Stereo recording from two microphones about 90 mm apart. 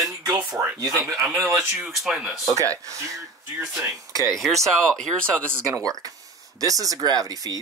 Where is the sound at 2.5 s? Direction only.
35° right (ahead or behind).